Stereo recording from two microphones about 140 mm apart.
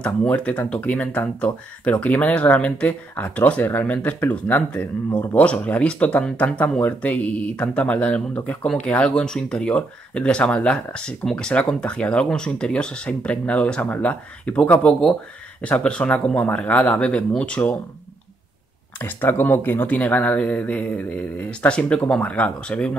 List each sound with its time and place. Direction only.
0.0 s speech: 10° left (ahead or behind)
18.9 s speech: 15° left (ahead or behind)